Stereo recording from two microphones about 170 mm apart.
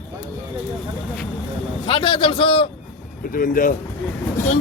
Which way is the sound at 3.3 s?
55° left (ahead or behind).